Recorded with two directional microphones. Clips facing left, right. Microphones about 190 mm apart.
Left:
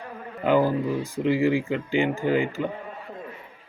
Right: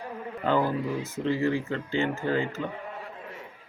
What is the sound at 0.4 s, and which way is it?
Speech, 15° left (ahead or behind).